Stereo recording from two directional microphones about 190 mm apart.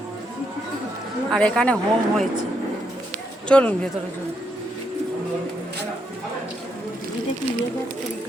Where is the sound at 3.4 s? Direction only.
5° left (ahead or behind).